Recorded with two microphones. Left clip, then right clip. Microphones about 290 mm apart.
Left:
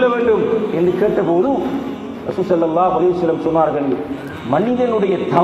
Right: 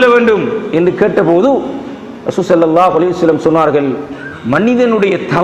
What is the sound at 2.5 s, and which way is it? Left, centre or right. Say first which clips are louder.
A man's voice: right 6 dB; right.